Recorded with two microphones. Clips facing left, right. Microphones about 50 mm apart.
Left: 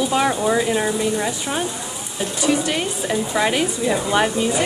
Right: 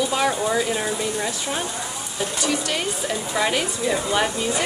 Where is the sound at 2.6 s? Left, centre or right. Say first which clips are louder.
Left 3 dB; centre.